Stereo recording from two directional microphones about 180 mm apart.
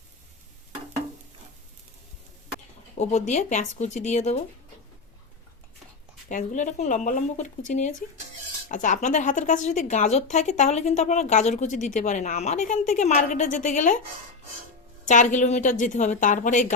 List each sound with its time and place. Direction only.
3.0 s a woman's voice: 40° left (ahead or behind)
6.2 s a woman's voice: 45° left (ahead or behind)
15.0 s a woman's voice: 45° left (ahead or behind)